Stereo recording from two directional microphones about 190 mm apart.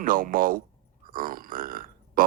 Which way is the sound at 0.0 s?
45° right (ahead or behind).